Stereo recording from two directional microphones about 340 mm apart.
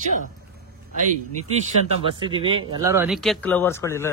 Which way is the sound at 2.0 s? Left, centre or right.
Centre.